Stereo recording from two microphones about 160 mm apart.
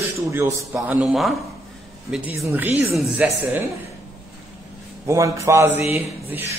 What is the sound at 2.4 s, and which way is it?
Speech, 10° right (ahead or behind).